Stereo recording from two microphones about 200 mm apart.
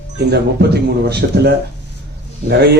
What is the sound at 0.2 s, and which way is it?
Speech, 55° right (ahead or behind).